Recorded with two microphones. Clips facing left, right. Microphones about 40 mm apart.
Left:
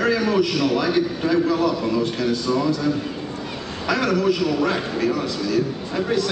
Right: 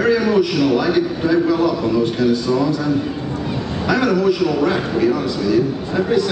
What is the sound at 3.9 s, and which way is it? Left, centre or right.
Speech, centre.